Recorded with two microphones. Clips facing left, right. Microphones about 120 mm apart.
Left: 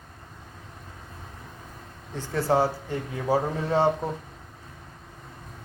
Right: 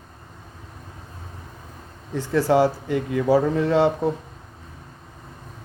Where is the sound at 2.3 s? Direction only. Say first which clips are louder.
Right 5 dB; 90° right.